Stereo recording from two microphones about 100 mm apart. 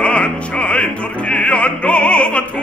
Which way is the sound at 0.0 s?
10° left (ahead or behind).